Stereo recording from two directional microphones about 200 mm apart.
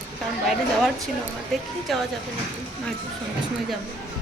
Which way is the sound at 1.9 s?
Centre (ahead or behind).